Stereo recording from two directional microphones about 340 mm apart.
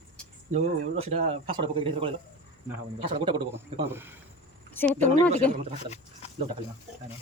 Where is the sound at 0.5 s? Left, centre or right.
Centre.